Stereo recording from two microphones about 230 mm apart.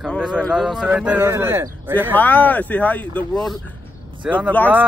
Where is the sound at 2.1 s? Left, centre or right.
Centre.